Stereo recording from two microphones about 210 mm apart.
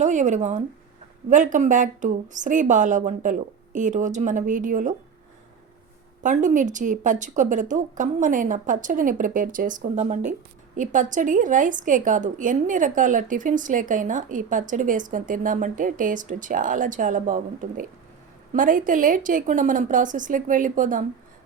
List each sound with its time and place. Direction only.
0.0 s a woman's voice: 35° right (ahead or behind)
6.2 s a woman's voice: 35° right (ahead or behind)